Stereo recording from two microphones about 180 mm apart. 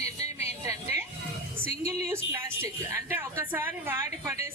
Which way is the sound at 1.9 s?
15° right (ahead or behind).